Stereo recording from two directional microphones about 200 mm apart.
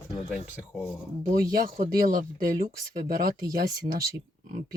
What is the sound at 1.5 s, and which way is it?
Speech, 45° right (ahead or behind).